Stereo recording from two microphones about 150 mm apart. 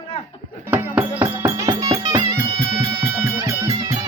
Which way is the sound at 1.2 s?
20° right (ahead or behind).